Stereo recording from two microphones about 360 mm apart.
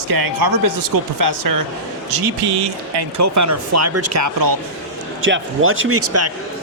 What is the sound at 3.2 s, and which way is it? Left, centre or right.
Speech, right.